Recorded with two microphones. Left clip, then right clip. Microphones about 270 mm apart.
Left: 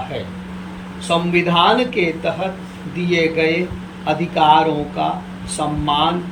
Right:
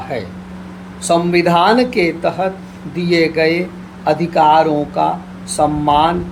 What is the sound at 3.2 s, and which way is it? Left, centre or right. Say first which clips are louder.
Speech: right 2 dB; centre.